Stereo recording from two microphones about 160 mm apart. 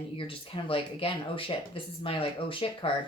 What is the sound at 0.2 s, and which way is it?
A woman's voice, 35° left (ahead or behind).